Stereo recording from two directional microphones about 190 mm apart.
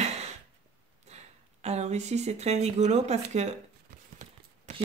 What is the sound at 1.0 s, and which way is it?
Speech, 35° right (ahead or behind).